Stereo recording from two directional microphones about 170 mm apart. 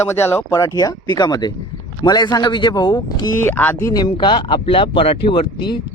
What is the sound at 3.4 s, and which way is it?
Speech, 10° left (ahead or behind).